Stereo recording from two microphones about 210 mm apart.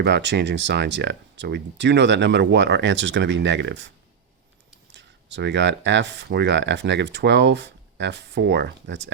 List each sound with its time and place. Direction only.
0.0 s speech: 55° right (ahead or behind)
4.9 s speech: 55° right (ahead or behind)